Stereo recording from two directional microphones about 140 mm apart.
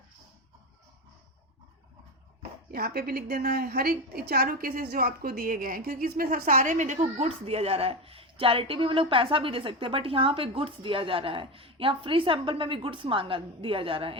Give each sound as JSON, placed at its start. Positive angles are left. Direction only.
{"t": 2.7, "sound": "a woman's voice", "side_deg": -90}